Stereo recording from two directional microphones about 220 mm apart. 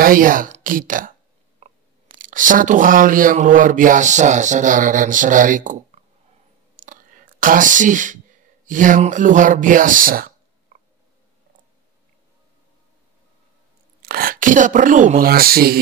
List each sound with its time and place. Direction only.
0.0 s speech: 40° right (ahead or behind)
1.6 s biting: 30° right (ahead or behind)
2.1 s speech: 35° right (ahead or behind)
6.8 s clicking: 40° right (ahead or behind)
8.6 s speech: 35° right (ahead or behind)
14.0 s speech: 40° right (ahead or behind)